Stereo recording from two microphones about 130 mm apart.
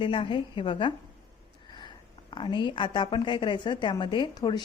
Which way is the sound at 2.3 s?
40° left (ahead or behind).